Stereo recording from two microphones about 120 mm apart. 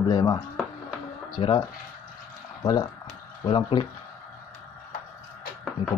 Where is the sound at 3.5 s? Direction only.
45° left (ahead or behind).